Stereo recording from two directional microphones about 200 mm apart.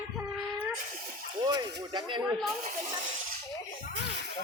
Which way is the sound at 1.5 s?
20° right (ahead or behind).